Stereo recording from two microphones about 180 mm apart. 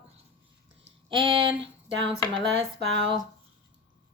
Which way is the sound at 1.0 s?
30° right (ahead or behind).